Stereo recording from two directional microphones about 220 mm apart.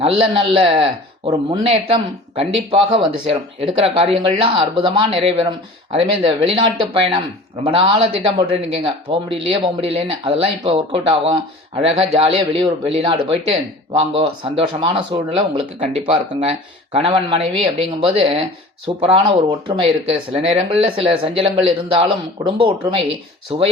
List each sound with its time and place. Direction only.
0.0 s speech: 25° right (ahead or behind)